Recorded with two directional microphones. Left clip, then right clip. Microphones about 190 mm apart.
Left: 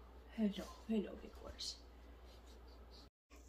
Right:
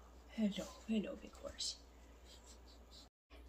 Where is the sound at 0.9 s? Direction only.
25° right (ahead or behind).